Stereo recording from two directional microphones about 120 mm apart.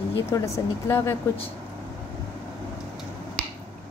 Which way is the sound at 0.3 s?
30° left (ahead or behind).